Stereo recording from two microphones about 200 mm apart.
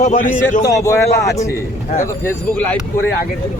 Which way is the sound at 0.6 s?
15° left (ahead or behind).